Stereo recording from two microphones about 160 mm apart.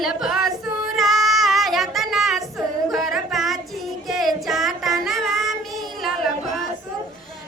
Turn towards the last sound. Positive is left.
turn(degrees=0)  # may be behind; listen again after turning